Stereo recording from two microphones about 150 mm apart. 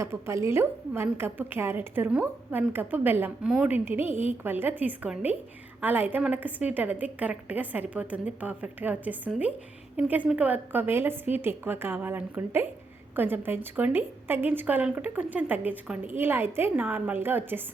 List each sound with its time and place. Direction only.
0.0 s a woman's voice: 20° right (ahead or behind)